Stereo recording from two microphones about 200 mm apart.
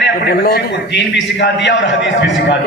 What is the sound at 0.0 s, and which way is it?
A man's voice, 50° left (ahead or behind).